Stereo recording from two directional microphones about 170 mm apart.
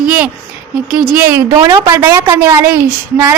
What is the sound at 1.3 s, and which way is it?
A woman's voice, 15° right (ahead or behind).